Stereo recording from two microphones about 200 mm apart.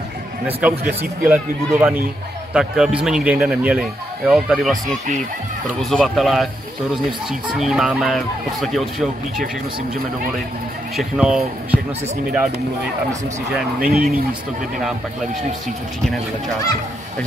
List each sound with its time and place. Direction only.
0.5 s a man's voice: 10° right (ahead or behind)
4.8 s speech: 40° right (ahead or behind)
5.8 s a man's voice: centre (ahead or behind)
7.5 s a man's voice: centre (ahead or behind)
11.0 s a man's voice: 5° right (ahead or behind)
13.7 s speech: 45° right (ahead or behind)